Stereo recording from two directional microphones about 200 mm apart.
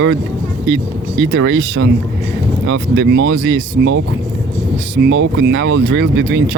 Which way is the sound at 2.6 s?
90° right.